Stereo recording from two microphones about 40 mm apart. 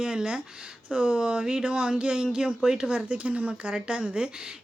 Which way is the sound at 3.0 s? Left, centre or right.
Right.